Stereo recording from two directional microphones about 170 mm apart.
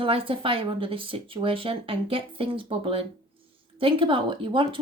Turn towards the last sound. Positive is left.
turn(degrees=-30)  # may be behind; listen again after turning